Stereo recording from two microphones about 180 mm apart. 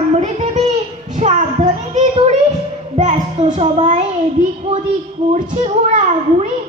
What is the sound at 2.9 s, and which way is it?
Music, 40° right (ahead or behind).